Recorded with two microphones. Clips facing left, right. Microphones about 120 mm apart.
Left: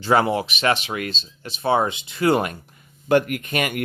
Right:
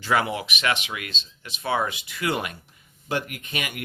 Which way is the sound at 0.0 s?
35° left (ahead or behind).